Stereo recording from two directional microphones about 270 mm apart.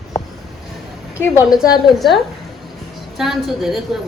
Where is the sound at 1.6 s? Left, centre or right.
Centre.